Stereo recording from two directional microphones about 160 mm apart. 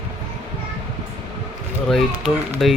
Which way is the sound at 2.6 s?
Centre (ahead or behind).